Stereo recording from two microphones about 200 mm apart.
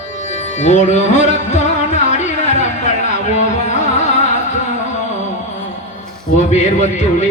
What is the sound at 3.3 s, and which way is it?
Carnatic music, 35° left (ahead or behind).